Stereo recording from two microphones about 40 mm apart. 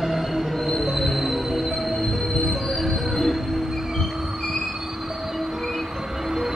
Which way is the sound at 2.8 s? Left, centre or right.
Centre.